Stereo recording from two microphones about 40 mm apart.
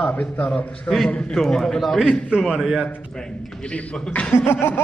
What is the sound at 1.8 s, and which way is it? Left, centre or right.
A man's voice, centre.